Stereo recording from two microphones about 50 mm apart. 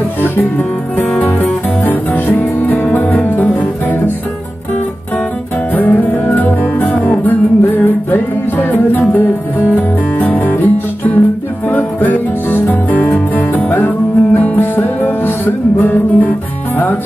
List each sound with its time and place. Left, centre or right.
0.2 s music: left
5.8 s music: left